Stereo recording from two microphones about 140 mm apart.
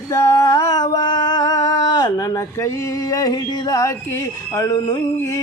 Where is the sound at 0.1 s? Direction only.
25° left (ahead or behind).